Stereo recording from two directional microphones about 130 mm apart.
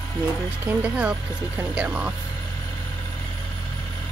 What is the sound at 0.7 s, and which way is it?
Speech, 10° right (ahead or behind).